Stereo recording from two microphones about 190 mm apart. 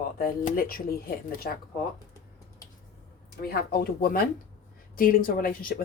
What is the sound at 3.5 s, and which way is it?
A woman's voice, 55° left (ahead or behind).